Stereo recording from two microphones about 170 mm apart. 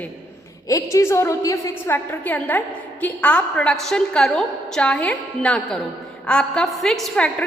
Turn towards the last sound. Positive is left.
turn(degrees=5)  # may be behind; listen again after turning